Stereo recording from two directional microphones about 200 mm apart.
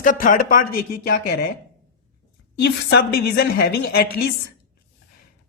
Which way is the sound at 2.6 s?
55° left (ahead or behind).